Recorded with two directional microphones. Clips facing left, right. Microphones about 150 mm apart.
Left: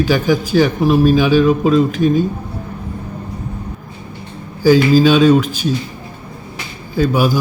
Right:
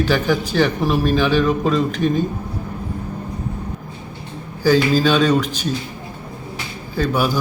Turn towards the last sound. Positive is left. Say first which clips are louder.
# left 4 dB
turn(degrees=10)  # may be behind; listen again after turning